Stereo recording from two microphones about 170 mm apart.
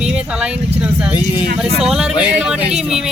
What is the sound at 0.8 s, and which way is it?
Vehicle, 5° right (ahead or behind).